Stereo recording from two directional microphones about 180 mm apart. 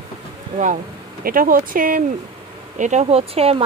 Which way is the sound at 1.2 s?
50° right (ahead or behind).